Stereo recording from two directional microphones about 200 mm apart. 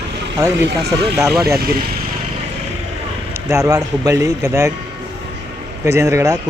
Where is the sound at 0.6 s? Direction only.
55° right (ahead or behind).